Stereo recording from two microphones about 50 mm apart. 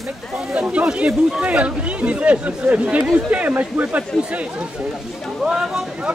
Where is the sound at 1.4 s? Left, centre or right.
Right.